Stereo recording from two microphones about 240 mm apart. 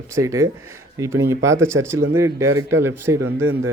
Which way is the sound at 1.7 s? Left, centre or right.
Right.